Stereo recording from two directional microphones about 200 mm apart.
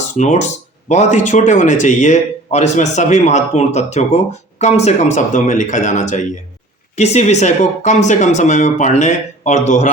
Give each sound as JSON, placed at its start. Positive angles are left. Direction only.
{"t": 0.1, "sound": "speech", "side_deg": 35}